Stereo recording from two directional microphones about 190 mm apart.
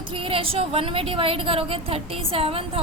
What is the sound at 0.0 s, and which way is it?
A woman's voice, 30° right (ahead or behind).